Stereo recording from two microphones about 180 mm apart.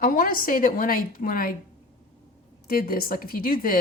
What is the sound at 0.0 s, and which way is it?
Speech, 50° left (ahead or behind).